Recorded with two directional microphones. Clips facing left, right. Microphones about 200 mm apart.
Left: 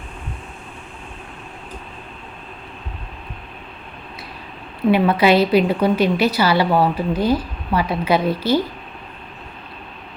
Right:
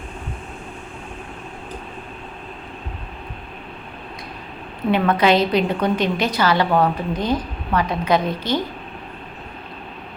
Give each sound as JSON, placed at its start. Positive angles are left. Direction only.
{"t": 4.9, "sound": "a woman's voice", "side_deg": 10}